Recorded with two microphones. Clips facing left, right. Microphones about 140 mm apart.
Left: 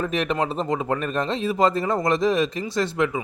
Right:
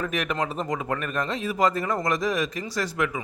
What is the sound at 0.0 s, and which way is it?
Speech, 30° left (ahead or behind).